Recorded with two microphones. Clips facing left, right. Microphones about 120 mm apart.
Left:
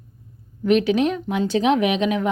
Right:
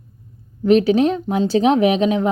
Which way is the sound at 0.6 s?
35° right (ahead or behind).